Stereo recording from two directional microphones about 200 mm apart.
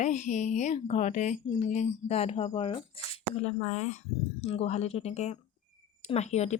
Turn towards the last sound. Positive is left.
turn(degrees=35)  # may be behind; listen again after turning